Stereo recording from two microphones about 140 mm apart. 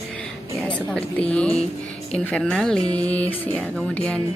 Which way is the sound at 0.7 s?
5° left (ahead or behind).